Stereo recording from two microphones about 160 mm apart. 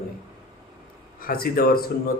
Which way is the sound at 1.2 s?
65° left (ahead or behind).